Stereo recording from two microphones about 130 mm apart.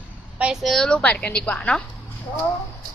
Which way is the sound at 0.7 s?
5° left (ahead or behind).